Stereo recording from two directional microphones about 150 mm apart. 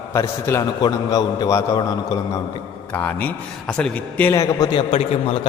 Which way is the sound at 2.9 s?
10° left (ahead or behind).